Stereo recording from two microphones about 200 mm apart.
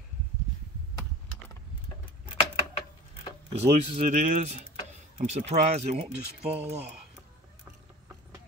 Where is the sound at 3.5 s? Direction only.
30° right (ahead or behind).